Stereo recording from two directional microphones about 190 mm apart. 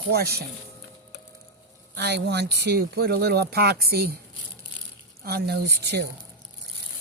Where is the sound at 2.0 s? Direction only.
60° right (ahead or behind).